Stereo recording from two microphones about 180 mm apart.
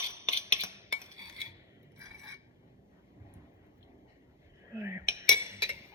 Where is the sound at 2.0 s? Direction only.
15° right (ahead or behind).